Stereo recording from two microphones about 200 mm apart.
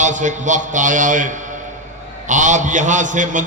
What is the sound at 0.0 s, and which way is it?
A man's voice, 40° right (ahead or behind).